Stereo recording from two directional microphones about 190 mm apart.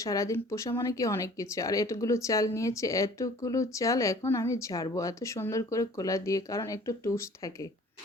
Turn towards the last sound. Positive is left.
turn(degrees=15)  # may be behind; listen again after turning